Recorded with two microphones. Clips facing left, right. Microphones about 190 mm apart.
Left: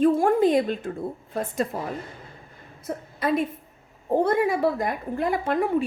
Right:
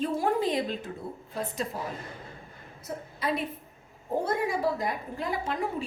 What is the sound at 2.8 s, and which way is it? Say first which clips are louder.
Speech: left 5 dB; 50° left (ahead or behind).